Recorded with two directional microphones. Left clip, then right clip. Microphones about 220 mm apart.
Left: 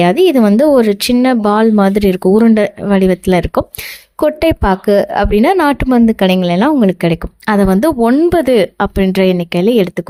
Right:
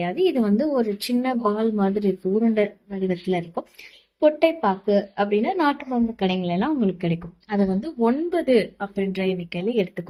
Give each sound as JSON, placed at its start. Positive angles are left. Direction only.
{"t": 0.0, "sound": "a woman's voice", "side_deg": 50}